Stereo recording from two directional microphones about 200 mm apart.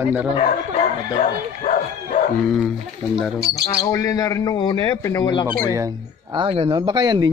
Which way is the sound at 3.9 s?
15° left (ahead or behind).